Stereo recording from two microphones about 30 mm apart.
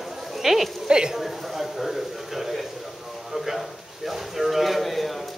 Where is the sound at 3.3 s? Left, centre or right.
Centre.